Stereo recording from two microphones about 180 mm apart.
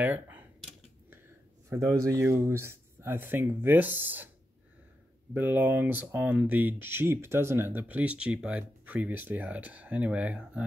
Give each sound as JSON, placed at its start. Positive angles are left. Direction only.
{"t": 0.0, "sound": "computer keyboard", "side_deg": -10}
{"t": 1.7, "sound": "speech", "side_deg": -15}
{"t": 5.3, "sound": "speech", "side_deg": -10}